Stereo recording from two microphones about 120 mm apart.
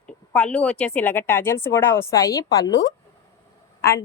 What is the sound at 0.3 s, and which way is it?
A woman's voice, 10° left (ahead or behind).